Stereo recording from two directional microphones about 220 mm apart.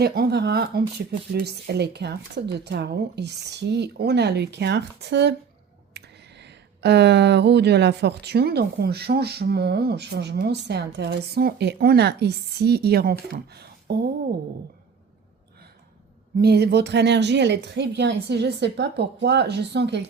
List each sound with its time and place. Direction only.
0.0 s speech: 45° right (ahead or behind)
16.4 s speech: 45° right (ahead or behind)